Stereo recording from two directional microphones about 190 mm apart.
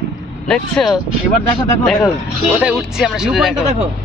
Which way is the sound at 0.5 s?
Centre (ahead or behind).